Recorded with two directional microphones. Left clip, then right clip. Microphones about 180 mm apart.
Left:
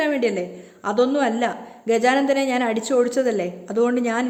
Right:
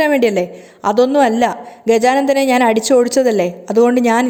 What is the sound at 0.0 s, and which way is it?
A woman's voice, 30° right (ahead or behind).